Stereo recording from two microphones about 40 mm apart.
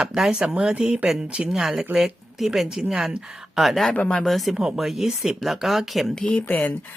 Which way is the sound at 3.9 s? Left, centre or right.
Left.